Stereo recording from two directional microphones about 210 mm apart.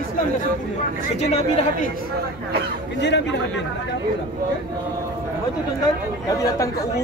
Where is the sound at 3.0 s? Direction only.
55° left (ahead or behind).